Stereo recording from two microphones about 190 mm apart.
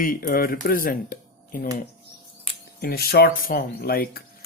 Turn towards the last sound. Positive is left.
turn(degrees=50)  # may be behind; listen again after turning